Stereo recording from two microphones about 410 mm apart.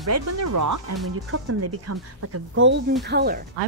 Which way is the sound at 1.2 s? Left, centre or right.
Right.